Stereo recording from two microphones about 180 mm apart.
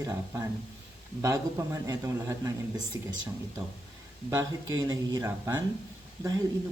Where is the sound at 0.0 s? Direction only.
20° right (ahead or behind).